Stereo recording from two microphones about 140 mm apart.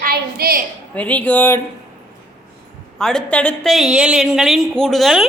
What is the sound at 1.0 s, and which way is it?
Speech, 10° left (ahead or behind).